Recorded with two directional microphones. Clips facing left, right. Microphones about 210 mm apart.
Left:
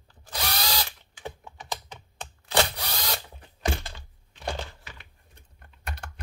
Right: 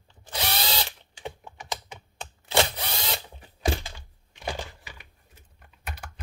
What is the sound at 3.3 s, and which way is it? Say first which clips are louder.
Typing: right 5 dB; 10° right (ahead or behind).